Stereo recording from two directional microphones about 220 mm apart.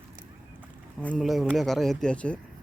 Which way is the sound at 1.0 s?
Centre (ahead or behind).